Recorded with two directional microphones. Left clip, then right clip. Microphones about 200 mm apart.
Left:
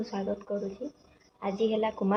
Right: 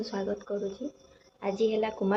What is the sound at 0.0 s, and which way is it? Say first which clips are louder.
Speech: right 1 dB; 15° right (ahead or behind).